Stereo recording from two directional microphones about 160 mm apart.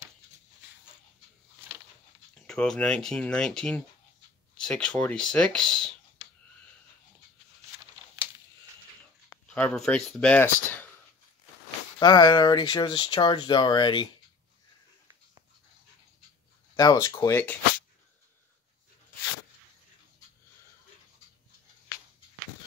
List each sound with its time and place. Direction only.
2.3 s speech: 5° left (ahead or behind)
8.2 s a sound: 10° right (ahead or behind)
9.3 s speech: 10° left (ahead or behind)
12.0 s speech: 25° left (ahead or behind)
16.7 s speech: 20° left (ahead or behind)